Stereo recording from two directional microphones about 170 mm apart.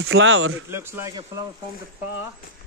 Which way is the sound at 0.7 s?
15° right (ahead or behind).